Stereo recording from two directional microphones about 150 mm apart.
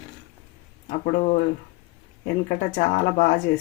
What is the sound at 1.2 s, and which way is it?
Speech, 50° left (ahead or behind).